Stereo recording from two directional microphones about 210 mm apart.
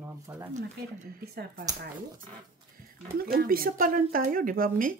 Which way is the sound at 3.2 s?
45° right (ahead or behind).